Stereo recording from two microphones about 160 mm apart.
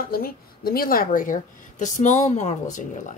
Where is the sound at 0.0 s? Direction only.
65° left (ahead or behind).